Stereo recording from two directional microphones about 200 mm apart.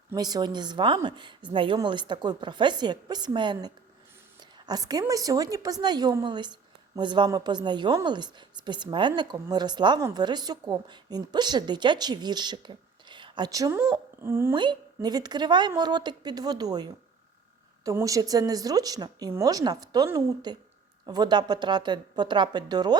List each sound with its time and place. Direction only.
0.1 s a woman's voice: 20° right (ahead or behind)
14.5 s a woman's voice: 20° right (ahead or behind)